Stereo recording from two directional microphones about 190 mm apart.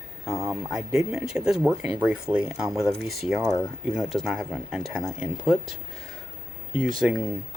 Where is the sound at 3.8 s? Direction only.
Centre (ahead or behind).